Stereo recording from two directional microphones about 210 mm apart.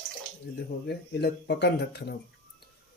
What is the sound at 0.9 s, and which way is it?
Speech, 55° left (ahead or behind).